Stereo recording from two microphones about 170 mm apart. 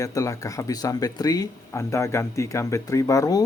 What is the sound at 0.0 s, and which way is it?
Speech, 20° left (ahead or behind).